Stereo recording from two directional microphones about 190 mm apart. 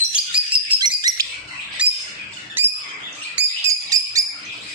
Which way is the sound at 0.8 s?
20° right (ahead or behind).